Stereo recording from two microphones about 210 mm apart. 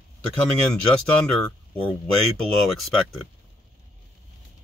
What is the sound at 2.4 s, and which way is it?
Speech, centre (ahead or behind).